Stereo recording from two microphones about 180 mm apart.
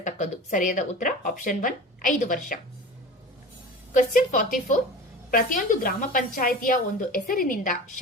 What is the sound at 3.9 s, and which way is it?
A woman's voice, 45° left (ahead or behind).